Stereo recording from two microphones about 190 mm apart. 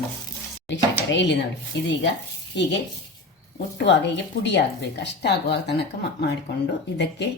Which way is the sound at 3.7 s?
70° left (ahead or behind).